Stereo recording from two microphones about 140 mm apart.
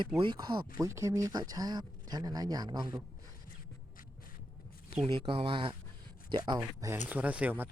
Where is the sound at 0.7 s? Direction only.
20° right (ahead or behind).